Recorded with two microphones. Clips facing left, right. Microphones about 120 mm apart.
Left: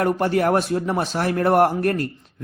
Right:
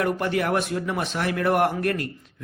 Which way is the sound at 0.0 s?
40° left (ahead or behind).